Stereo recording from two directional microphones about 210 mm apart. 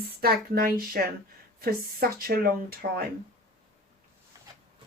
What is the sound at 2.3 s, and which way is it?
Speech, 45° right (ahead or behind).